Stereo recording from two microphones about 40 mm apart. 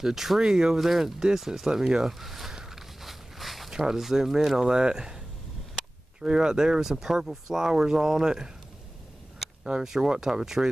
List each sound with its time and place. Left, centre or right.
0.0 s speech: centre
2.5 s walk: centre
3.7 s speech: centre
9.8 s speech: centre